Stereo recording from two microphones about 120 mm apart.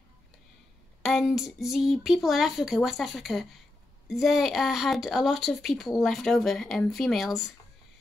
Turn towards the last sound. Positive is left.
turn(degrees=0)  # may be behind; listen again after turning